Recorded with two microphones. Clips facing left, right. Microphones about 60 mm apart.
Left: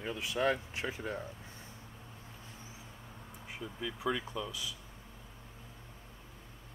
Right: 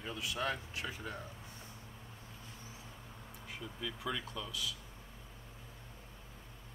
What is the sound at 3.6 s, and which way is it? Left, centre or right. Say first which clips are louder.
Speech: left 4 dB; centre.